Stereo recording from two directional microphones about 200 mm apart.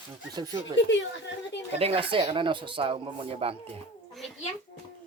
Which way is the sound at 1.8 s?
30° right (ahead or behind).